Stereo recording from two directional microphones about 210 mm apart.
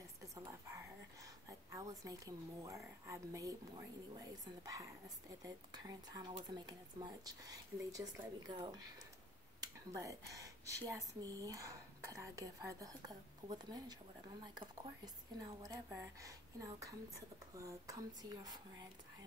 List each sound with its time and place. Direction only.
0.4 s a sound: 15° right (ahead or behind)
1.7 s a woman's voice: 15° right (ahead or behind)
5.4 s a woman's voice: 20° right (ahead or behind)